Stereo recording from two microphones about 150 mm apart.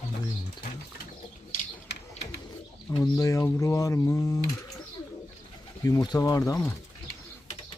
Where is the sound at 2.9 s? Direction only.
25° left (ahead or behind).